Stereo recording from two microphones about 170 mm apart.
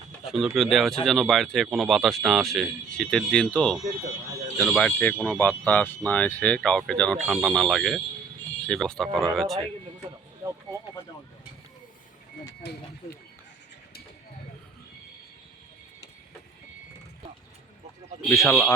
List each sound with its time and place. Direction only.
0.3 s speech: centre (ahead or behind)
12.6 s vehicle: 75° left (ahead or behind)
18.3 s speech: 10° left (ahead or behind)